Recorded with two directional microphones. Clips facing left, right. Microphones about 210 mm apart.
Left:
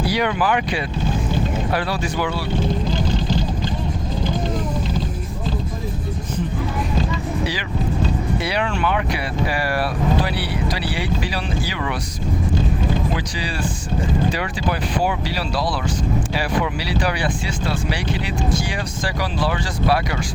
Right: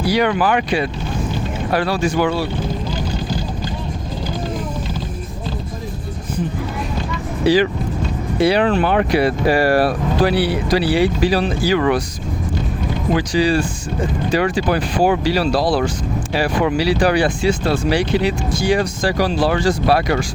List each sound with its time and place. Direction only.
0.1 s speech: 45° right (ahead or behind)
7.4 s speech: 35° right (ahead or behind)
13.1 s speech: 45° right (ahead or behind)
18.7 s speech: 40° right (ahead or behind)